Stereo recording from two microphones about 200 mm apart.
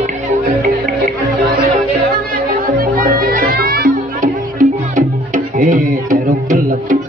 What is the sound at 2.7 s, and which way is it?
Music, 45° right (ahead or behind).